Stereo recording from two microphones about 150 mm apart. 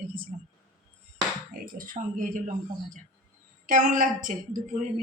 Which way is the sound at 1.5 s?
70° right (ahead or behind).